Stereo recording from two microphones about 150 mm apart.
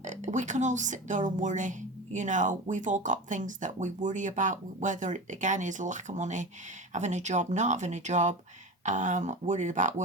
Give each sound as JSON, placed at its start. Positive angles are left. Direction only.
{"t": 0.0, "sound": "speech", "side_deg": -55}